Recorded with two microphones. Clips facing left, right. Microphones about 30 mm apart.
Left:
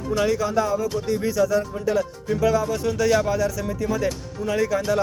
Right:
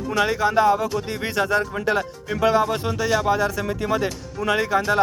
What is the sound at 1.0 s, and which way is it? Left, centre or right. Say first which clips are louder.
Speech: left 2 dB; right.